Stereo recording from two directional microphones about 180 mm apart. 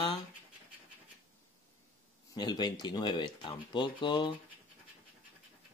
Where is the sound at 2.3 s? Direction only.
25° left (ahead or behind).